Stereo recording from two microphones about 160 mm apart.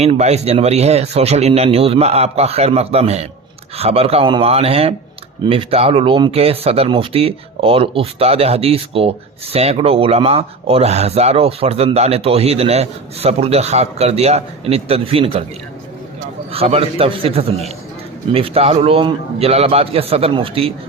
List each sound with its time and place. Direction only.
0.0 s speech: 40° right (ahead or behind)
16.5 s speech: 40° right (ahead or behind)